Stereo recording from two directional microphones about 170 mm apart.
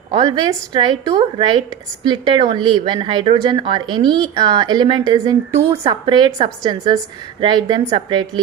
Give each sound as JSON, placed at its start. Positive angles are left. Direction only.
{"t": 0.1, "sound": "speech", "side_deg": -25}
{"t": 5.5, "sound": "speech", "side_deg": -35}